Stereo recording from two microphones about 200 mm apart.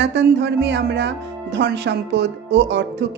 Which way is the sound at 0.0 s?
60° right (ahead or behind).